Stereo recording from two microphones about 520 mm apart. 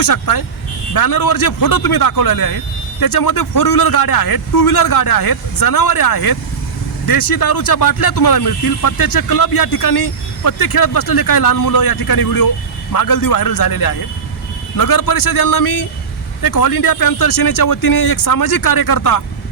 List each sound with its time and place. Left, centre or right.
0.0 s speech: left